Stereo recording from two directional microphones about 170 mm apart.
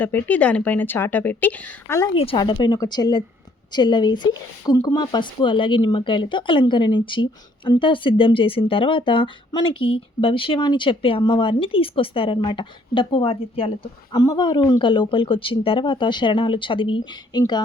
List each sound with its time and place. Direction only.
0.0 s a woman's voice: 10° left (ahead or behind)
2.1 s speech: 30° left (ahead or behind)